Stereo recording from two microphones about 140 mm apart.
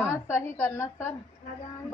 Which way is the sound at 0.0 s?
15° left (ahead or behind).